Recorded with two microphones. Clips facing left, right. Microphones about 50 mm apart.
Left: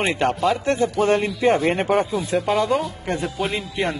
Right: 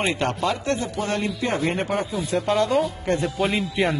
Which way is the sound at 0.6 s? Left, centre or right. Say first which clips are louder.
Left 6 dB; left.